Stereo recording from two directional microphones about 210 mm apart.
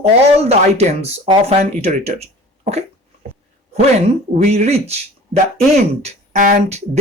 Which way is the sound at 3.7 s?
30° right (ahead or behind).